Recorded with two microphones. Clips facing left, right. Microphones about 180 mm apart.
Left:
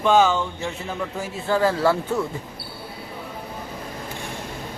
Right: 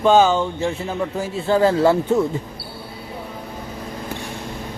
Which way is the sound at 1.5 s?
25° right (ahead or behind).